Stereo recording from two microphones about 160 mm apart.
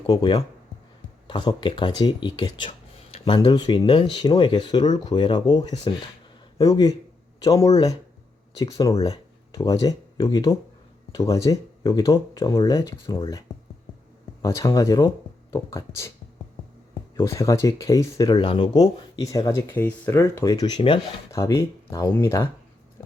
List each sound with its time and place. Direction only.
0.1 s speech: 30° left (ahead or behind)
14.4 s speech: 20° left (ahead or behind)
17.2 s speech: 15° left (ahead or behind)
21.3 s speech: 20° left (ahead or behind)
23.0 s a sound: 20° left (ahead or behind)